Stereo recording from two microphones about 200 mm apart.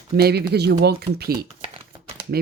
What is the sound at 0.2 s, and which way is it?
Speech, 55° right (ahead or behind).